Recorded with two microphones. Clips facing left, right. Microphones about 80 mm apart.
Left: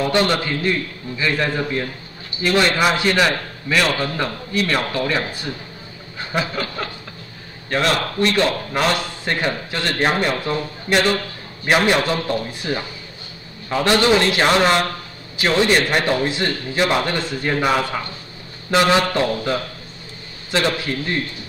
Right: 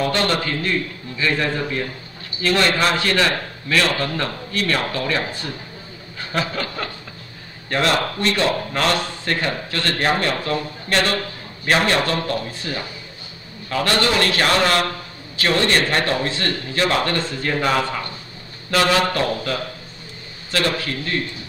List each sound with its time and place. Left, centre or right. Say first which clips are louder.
0.0 s a man's voice: left 2 dB; centre
8.7 s a man's voice: left 1 dB; centre